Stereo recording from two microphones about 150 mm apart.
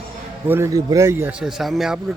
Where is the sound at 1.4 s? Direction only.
Centre (ahead or behind).